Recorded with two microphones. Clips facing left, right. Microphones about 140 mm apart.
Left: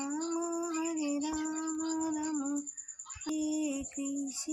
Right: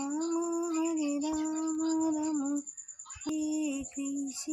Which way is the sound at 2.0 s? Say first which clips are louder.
Right 4 dB; 20° right (ahead or behind).